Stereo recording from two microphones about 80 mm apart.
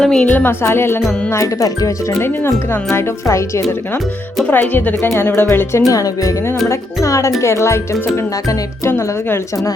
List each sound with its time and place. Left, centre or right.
0.0 s speech: centre
0.3 s speech: left
1.3 s speech: left
3.2 s speech: left
4.4 s speech: left
5.0 s speech: left
5.9 s speech: left